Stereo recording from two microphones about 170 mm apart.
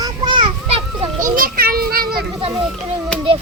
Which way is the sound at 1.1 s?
55° right (ahead or behind).